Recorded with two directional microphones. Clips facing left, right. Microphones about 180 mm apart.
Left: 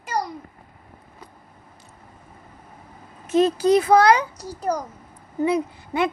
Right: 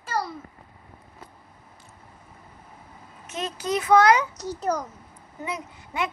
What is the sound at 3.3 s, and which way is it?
A child's voice, 35° left (ahead or behind).